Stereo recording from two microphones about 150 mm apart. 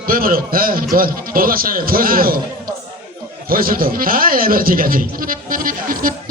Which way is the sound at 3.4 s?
75° right (ahead or behind).